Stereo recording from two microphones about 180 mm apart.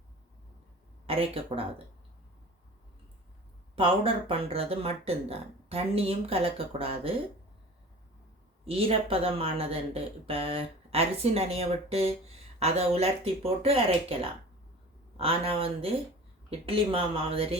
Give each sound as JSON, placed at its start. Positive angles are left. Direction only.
{"t": 1.0, "sound": "speech", "side_deg": -30}
{"t": 3.8, "sound": "speech", "side_deg": -30}
{"t": 8.6, "sound": "speech", "side_deg": -35}